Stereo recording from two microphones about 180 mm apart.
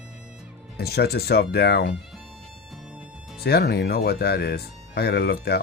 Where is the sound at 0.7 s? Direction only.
60° left (ahead or behind).